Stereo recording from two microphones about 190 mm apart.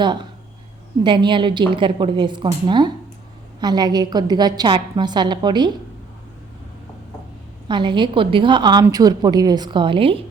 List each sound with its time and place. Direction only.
0.0 s a woman's voice: 25° right (ahead or behind)
7.7 s a woman's voice: 25° right (ahead or behind)